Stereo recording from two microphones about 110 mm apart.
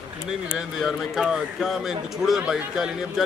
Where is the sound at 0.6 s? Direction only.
5° right (ahead or behind).